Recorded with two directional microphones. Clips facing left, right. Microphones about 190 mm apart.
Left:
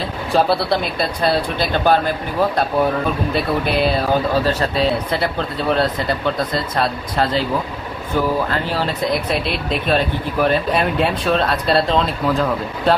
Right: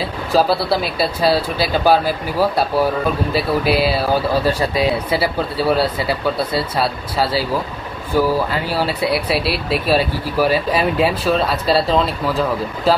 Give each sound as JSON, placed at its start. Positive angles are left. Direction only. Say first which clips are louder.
{"t": 0.3, "sound": "speech", "louder": "right 1 dB", "side_deg": 0}